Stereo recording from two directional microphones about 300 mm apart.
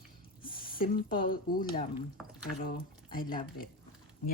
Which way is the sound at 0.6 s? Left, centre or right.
Left.